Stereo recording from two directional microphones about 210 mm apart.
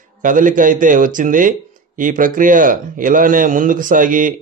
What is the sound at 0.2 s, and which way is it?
A man's voice, 40° right (ahead or behind).